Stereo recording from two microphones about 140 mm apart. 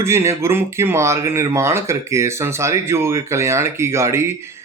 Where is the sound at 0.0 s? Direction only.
20° right (ahead or behind).